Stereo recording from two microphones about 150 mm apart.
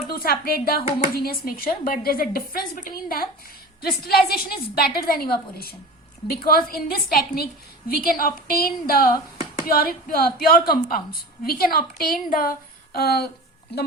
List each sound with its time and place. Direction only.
0.1 s a woman's voice: 80° left